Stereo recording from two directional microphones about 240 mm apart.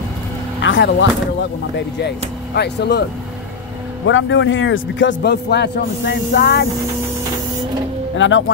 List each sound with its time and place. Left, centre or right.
0.6 s vehicle: left
1.8 s speech: left
4.0 s speech: left
8.2 s speech: left